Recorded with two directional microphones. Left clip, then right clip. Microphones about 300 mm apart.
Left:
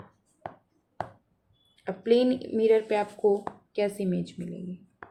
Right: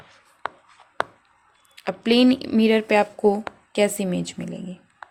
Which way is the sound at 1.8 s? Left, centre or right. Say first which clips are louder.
Right 4 dB; right.